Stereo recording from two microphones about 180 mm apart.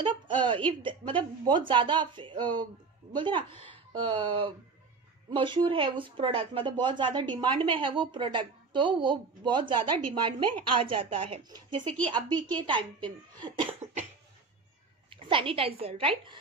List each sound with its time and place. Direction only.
0.0 s a sound: 25° right (ahead or behind)
0.8 s speech: 30° right (ahead or behind)
15.0 s a woman's voice: 30° right (ahead or behind)